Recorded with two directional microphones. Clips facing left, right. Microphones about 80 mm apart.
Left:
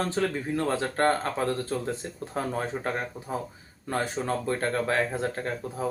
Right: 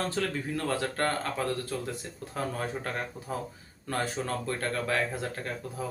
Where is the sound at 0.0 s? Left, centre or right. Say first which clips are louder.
Left 3 dB; left.